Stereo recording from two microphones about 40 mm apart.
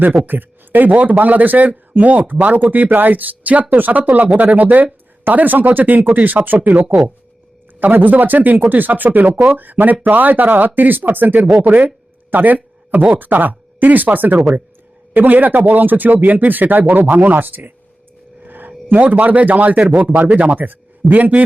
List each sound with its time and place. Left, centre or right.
0.3 s speech: right
12.5 s speech: right
18.4 s a sound: right
18.9 s speech: right